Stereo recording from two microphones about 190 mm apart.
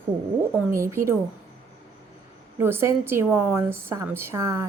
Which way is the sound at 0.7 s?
15° right (ahead or behind).